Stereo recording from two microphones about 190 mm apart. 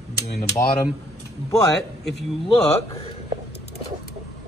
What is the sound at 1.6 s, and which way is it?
Speech, centre (ahead or behind).